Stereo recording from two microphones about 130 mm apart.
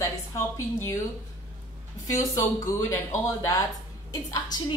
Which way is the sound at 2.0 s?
25° left (ahead or behind).